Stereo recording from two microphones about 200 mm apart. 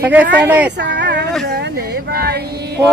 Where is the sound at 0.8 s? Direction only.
60° right (ahead or behind).